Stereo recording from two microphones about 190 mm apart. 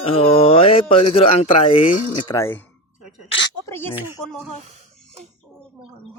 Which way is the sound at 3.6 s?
10° left (ahead or behind).